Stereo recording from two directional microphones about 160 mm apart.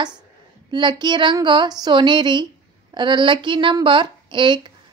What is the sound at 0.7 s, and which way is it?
Child singing, 30° right (ahead or behind).